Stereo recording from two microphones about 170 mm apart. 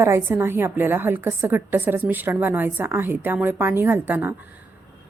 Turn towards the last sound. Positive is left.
turn(degrees=-10)  # may be behind; listen again after turning